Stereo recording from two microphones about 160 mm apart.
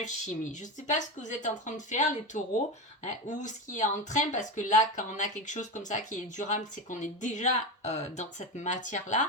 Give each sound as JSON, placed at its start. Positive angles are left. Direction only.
{"t": 0.0, "sound": "speech", "side_deg": 50}